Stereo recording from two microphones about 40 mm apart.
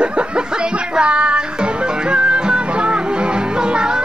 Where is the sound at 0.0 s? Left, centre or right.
Right.